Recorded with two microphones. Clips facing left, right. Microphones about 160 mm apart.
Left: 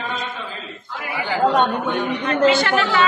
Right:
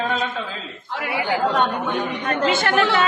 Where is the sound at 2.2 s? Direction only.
50° right (ahead or behind).